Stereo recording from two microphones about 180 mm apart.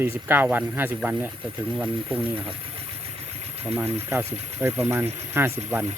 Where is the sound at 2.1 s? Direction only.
30° right (ahead or behind).